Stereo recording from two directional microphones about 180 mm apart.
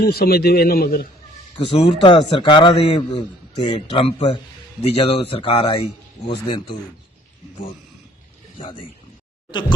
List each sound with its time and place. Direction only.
0.0 s speech: 60° left (ahead or behind)
1.5 s a man's voice: 30° left (ahead or behind)
8.5 s a man's voice: 30° left (ahead or behind)